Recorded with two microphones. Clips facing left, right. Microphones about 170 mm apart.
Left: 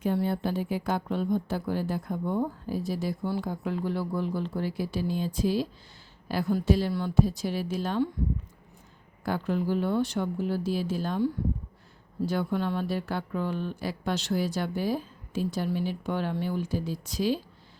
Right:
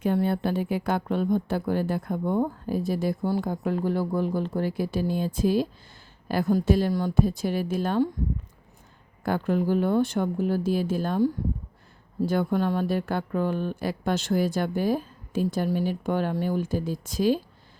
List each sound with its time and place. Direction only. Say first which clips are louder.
0.0 s a woman's voice: right 3 dB; 60° right (ahead or behind)
9.2 s a woman's voice: right 4 dB; 50° right (ahead or behind)